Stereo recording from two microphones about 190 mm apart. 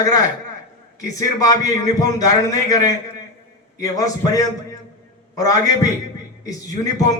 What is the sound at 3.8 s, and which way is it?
Speech, 20° left (ahead or behind).